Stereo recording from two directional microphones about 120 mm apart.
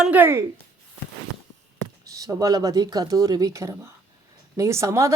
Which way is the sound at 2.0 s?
30° right (ahead or behind).